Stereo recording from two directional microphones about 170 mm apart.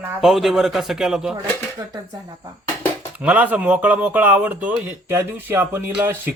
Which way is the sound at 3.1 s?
5° right (ahead or behind).